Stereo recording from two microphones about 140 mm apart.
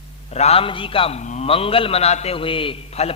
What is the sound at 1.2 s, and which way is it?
Speech, 55° left (ahead or behind).